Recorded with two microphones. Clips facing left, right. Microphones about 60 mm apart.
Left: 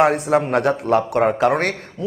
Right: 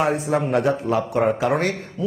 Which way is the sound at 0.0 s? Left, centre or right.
Left.